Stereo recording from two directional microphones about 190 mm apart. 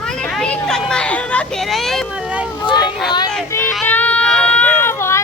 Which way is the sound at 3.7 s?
5° left (ahead or behind).